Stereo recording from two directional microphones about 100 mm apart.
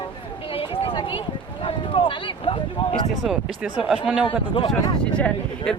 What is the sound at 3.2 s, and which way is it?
Speech, 5° right (ahead or behind).